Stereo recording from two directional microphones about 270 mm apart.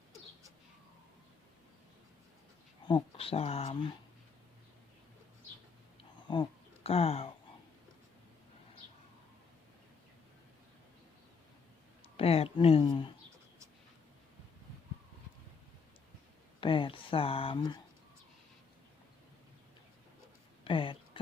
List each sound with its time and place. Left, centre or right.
2.8 s speech: centre
6.2 s speech: centre
12.1 s speech: left
16.6 s speech: centre
20.7 s a sound: centre